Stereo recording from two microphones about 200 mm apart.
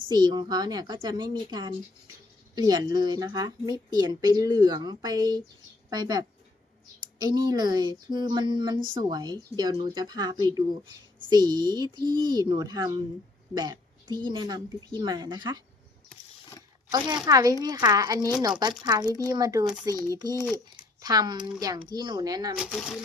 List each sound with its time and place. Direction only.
0.1 s a woman's voice: 20° right (ahead or behind)
17.2 s a woman's voice: 15° right (ahead or behind)
22.7 s speech: centre (ahead or behind)